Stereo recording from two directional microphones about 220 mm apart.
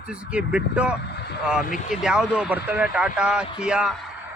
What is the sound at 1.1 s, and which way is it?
Vehicle, 50° left (ahead or behind).